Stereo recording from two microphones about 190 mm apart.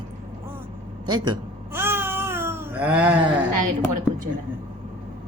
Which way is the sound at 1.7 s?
10° right (ahead or behind).